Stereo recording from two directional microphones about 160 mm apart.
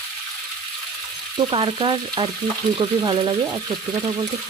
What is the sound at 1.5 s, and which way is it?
Frying, 30° right (ahead or behind).